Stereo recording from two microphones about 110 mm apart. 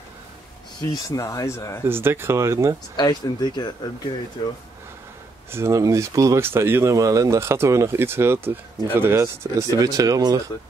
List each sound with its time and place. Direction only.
1.0 s speech: 30° left (ahead or behind)
1.9 s speech: 20° right (ahead or behind)
3.0 s speech: 40° left (ahead or behind)
5.5 s speech: 25° right (ahead or behind)